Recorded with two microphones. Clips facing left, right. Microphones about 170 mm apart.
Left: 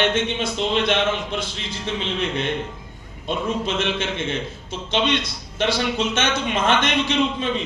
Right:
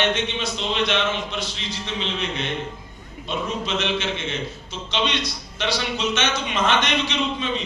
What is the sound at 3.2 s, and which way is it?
A man's voice, 50° left (ahead or behind).